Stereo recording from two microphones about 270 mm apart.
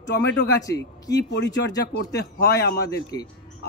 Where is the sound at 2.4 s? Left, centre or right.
Left.